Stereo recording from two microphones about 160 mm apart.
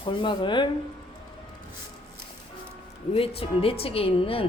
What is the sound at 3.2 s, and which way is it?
Speech, 35° left (ahead or behind).